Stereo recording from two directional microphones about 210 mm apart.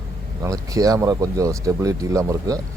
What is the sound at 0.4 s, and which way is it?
Speech, 15° right (ahead or behind).